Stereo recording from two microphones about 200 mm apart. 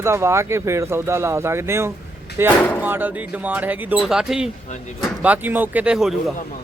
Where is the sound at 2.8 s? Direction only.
10° right (ahead or behind).